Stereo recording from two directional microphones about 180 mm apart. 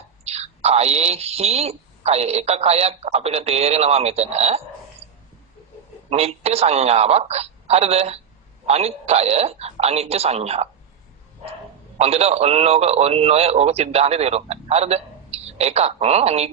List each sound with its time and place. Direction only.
0.3 s a man's voice: 35° right (ahead or behind)
6.1 s a man's voice: 35° right (ahead or behind)
11.9 s a man's voice: 35° right (ahead or behind)